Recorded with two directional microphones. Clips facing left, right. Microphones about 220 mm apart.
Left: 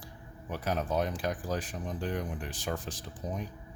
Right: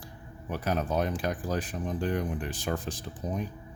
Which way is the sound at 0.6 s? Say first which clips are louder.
Right 2 dB; 60° right (ahead or behind).